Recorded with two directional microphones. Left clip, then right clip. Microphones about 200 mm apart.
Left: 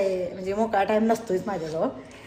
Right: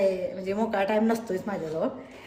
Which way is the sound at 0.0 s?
10° right (ahead or behind).